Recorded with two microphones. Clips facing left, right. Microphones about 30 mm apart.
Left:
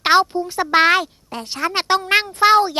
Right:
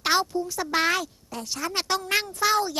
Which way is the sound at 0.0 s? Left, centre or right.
Left.